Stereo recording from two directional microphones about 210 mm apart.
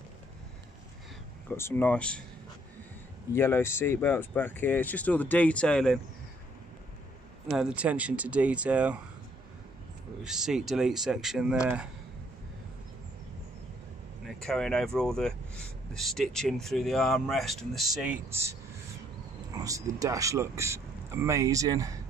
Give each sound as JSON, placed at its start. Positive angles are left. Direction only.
{"t": 1.5, "sound": "speech", "side_deg": 10}
{"t": 3.3, "sound": "speech", "side_deg": 10}
{"t": 7.4, "sound": "speech", "side_deg": -5}
{"t": 10.2, "sound": "speech", "side_deg": 0}
{"t": 14.2, "sound": "speech", "side_deg": 0}